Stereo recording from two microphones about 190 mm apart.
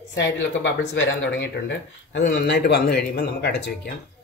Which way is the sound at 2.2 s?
60° left (ahead or behind).